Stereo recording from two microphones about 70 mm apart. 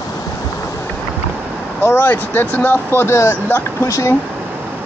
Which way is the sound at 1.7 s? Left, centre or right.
Left.